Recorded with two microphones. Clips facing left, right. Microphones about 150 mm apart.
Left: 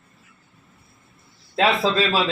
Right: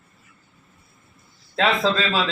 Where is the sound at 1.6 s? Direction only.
10° left (ahead or behind).